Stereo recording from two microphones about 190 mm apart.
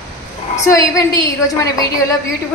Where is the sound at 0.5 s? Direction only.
15° left (ahead or behind).